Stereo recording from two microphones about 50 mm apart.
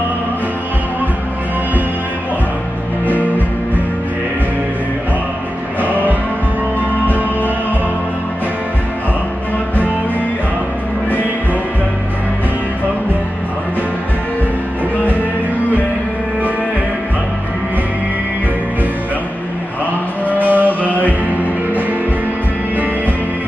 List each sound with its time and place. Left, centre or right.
3.1 s music: left
20.2 s music: left